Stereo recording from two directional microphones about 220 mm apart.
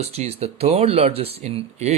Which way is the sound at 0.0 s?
30° right (ahead or behind).